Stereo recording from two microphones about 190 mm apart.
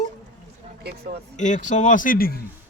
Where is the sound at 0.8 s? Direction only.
55° right (ahead or behind).